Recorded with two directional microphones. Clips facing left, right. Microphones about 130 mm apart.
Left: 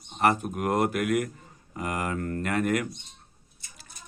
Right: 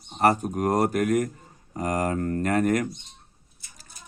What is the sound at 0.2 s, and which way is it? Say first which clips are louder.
Speech: right 3 dB; 40° right (ahead or behind).